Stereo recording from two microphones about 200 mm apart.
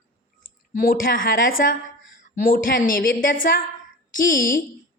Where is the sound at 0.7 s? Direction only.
45° left (ahead or behind).